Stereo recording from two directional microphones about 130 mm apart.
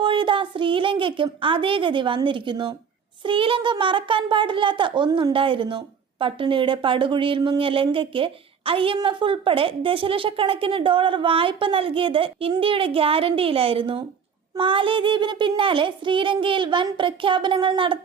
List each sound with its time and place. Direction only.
0.0 s a woman's voice: 40° right (ahead or behind)